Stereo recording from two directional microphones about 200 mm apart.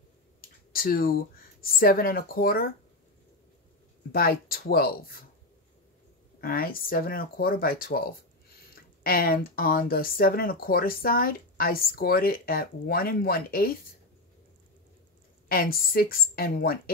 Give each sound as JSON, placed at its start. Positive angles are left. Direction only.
{"t": 0.4, "sound": "a sound", "side_deg": 45}
{"t": 1.6, "sound": "speech", "side_deg": 45}
{"t": 4.1, "sound": "speech", "side_deg": 50}
{"t": 6.4, "sound": "speech", "side_deg": 45}
{"t": 9.0, "sound": "speech", "side_deg": 45}
{"t": 15.4, "sound": "speech", "side_deg": 45}